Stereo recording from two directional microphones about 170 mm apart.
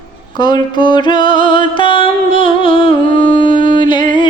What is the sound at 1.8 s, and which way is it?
Music, 30° left (ahead or behind).